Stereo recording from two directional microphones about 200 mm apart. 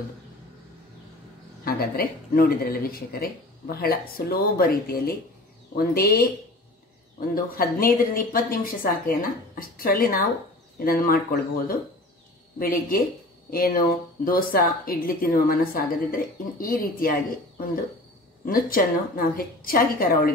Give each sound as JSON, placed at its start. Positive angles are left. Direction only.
{"t": 1.6, "sound": "speech", "side_deg": 50}
{"t": 12.5, "sound": "speech", "side_deg": 45}